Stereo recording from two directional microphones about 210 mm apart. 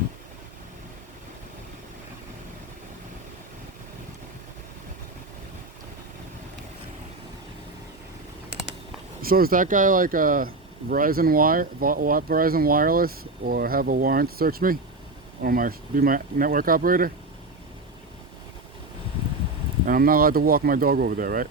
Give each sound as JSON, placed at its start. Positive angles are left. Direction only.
{"t": 9.2, "sound": "speech", "side_deg": -45}
{"t": 19.8, "sound": "speech", "side_deg": -40}